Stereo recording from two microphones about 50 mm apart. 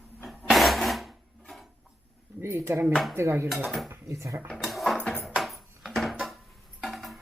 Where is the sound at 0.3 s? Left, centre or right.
Centre.